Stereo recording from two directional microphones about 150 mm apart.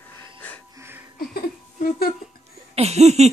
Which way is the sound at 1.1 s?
75° left (ahead or behind).